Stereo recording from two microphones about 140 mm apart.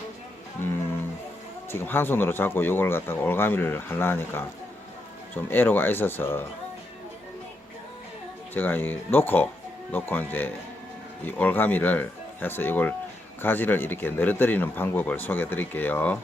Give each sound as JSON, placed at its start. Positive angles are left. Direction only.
{"t": 1.7, "sound": "a man's voice", "side_deg": 15}
{"t": 8.5, "sound": "a man's voice", "side_deg": 15}